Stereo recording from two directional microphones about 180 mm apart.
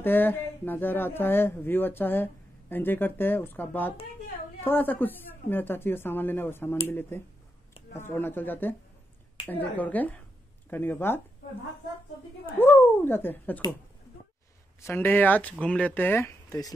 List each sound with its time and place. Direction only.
0.0 s a woman's voice: 10° left (ahead or behind)
12.5 s a woman's voice: 10° left (ahead or behind)
14.8 s a woman's voice: 15° left (ahead or behind)